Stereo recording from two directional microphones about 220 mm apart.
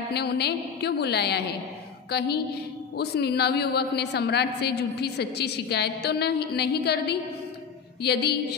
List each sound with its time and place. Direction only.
0.1 s a woman's voice: 50° left (ahead or behind)